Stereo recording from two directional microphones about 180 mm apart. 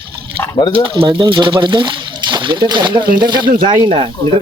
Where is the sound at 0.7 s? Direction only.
30° right (ahead or behind).